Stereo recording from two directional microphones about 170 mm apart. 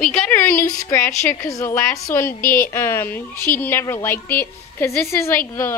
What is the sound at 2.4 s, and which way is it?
Speech, 55° left (ahead or behind).